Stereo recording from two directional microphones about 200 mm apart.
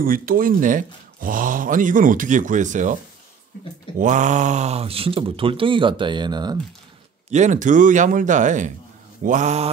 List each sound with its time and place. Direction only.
0.0 s speech: 45° right (ahead or behind)
4.0 s speech: 40° right (ahead or behind); by 6.6 s 20° right (ahead or behind)
7.2 s speech: 35° right (ahead or behind)